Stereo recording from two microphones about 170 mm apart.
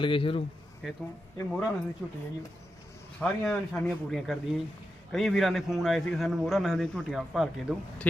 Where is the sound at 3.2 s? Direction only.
5° left (ahead or behind).